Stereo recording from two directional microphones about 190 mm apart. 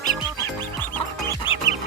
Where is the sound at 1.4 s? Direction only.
30° left (ahead or behind).